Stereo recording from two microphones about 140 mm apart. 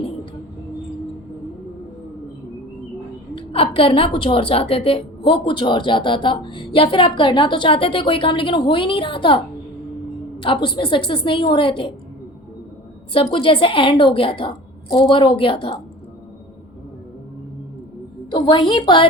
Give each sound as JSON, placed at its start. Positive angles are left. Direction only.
{"t": 3.3, "sound": "a woman's voice", "side_deg": 40}
{"t": 10.4, "sound": "a woman's voice", "side_deg": 35}
{"t": 13.1, "sound": "a woman's voice", "side_deg": 40}
{"t": 18.3, "sound": "a woman's voice", "side_deg": 35}